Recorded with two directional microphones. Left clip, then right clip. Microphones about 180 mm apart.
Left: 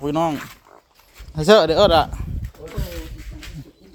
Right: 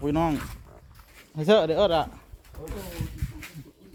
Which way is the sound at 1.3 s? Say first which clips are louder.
Left 7 dB; 25° left (ahead or behind).